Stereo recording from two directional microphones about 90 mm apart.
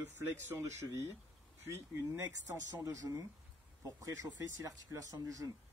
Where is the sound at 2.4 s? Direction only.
40° right (ahead or behind).